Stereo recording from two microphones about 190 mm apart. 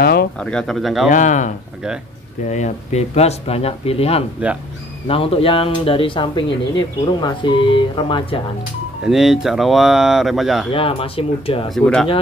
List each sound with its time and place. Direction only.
0.0 s a sound: 55° left (ahead or behind)
0.4 s speech: 5° left (ahead or behind)
1.1 s speech: 40° left (ahead or behind)
2.5 s speech: 35° left (ahead or behind)
4.4 s speech: 10° right (ahead or behind)
5.0 s speech: 30° left (ahead or behind)
9.0 s speech: centre (ahead or behind)
10.7 s speech: 30° left (ahead or behind)
11.7 s speech: 5° left (ahead or behind)